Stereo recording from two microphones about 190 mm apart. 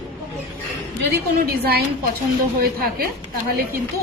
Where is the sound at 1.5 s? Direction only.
55° right (ahead or behind).